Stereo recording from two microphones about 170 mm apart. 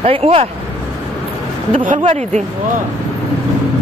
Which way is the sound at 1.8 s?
50° right (ahead or behind).